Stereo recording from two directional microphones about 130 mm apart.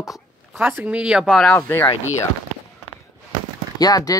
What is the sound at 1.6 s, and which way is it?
Speech, 15° left (ahead or behind).